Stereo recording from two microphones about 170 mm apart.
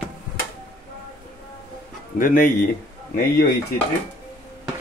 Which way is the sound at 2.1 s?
55° left (ahead or behind).